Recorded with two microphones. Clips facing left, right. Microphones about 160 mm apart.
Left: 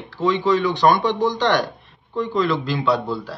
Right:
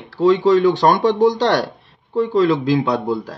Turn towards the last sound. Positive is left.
turn(degrees=-45)  # may be behind; listen again after turning